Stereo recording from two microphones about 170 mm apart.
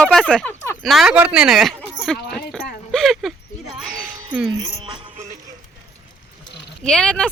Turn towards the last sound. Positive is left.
turn(degrees=5)  # may be behind; listen again after turning